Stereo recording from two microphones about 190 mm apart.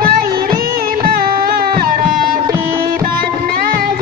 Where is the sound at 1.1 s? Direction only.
50° right (ahead or behind).